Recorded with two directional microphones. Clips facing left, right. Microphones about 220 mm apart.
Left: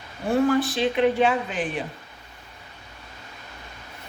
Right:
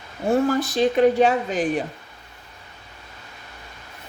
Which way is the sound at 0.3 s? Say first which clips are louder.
Right 1 dB; 40° right (ahead or behind).